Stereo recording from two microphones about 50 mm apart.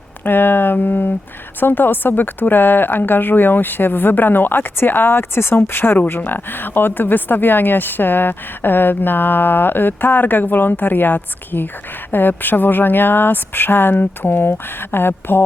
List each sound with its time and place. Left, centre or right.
0.3 s speech: left